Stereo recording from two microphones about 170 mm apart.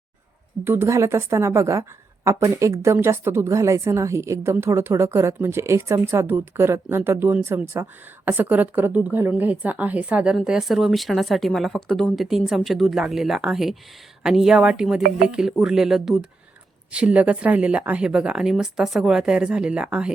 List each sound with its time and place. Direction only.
0.6 s a woman's voice: 15° right (ahead or behind)